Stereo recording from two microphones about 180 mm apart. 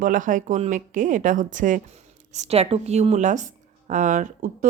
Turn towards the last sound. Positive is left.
turn(degrees=-45)  # may be behind; listen again after turning